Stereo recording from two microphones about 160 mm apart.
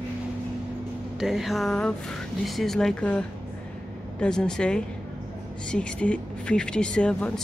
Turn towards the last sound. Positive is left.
turn(degrees=5)  # may be behind; listen again after turning